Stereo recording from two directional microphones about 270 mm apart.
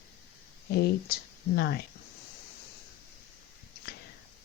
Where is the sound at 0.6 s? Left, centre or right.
Left.